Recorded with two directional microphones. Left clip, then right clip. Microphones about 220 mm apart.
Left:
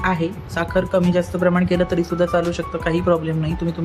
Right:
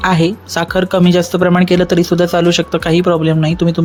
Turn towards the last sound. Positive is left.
turn(degrees=-35)  # may be behind; listen again after turning